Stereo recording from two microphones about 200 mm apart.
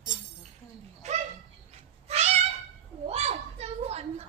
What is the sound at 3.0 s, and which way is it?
Children playing, 30° right (ahead or behind).